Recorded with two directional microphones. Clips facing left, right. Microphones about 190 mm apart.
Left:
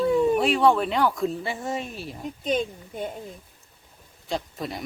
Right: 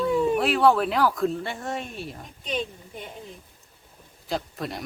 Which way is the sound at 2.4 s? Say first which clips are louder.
Left 4 dB; 45° left (ahead or behind).